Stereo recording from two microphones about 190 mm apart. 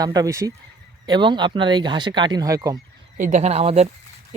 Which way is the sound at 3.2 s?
35° right (ahead or behind).